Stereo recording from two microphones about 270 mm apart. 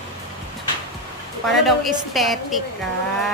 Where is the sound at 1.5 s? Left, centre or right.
Centre.